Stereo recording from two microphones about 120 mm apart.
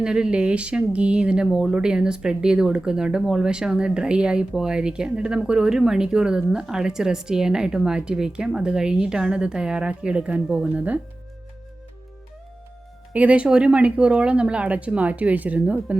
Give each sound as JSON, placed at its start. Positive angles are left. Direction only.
{"t": 0.0, "sound": "speech", "side_deg": -5}
{"t": 13.1, "sound": "speech", "side_deg": -10}